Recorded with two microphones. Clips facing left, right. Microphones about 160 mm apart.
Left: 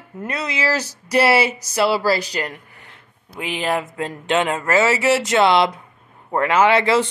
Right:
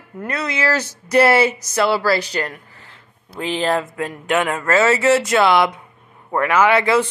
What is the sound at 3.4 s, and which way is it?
Speech, 10° left (ahead or behind).